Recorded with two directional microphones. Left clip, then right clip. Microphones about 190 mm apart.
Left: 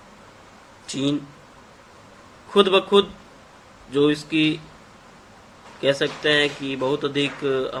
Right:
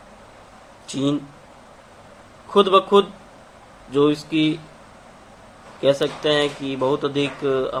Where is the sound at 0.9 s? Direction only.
15° left (ahead or behind).